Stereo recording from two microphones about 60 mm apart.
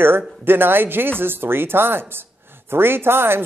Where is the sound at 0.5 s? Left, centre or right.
Right.